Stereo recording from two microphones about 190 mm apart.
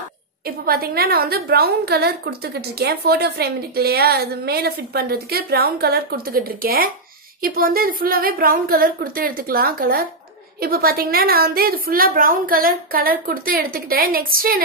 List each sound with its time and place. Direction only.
0.7 s a woman's voice: 55° right (ahead or behind)